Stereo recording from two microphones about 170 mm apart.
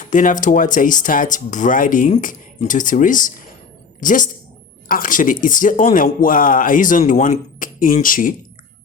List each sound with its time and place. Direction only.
0.0 s speech: 50° left (ahead or behind)